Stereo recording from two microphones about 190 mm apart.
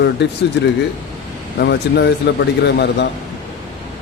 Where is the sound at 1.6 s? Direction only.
65° left (ahead or behind).